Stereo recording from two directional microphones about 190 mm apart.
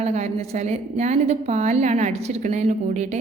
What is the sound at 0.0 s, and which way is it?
A woman's voice, 35° right (ahead or behind).